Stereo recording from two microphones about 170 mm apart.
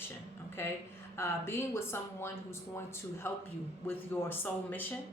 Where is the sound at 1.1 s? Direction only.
15° left (ahead or behind).